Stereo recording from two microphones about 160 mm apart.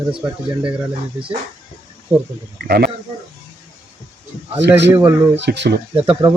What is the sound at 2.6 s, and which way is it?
Speech, 75° right (ahead or behind).